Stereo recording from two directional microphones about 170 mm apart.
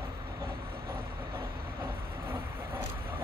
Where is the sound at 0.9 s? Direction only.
15° right (ahead or behind).